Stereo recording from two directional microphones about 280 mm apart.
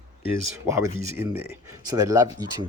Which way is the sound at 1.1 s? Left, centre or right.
Centre.